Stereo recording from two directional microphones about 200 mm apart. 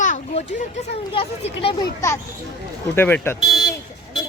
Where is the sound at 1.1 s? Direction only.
30° left (ahead or behind).